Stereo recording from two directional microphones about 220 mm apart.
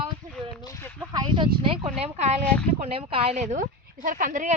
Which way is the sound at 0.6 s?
10° left (ahead or behind).